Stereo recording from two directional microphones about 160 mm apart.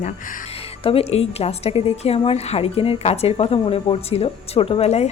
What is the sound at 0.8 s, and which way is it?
A woman's voice, 40° left (ahead or behind).